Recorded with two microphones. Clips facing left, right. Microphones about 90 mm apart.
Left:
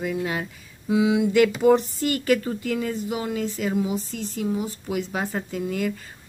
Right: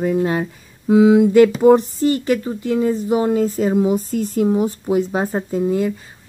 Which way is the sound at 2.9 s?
40° right (ahead or behind).